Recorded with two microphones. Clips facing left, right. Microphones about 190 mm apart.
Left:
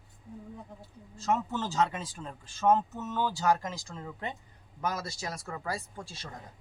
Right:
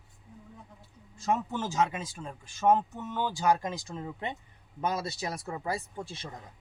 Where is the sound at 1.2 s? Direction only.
15° right (ahead or behind).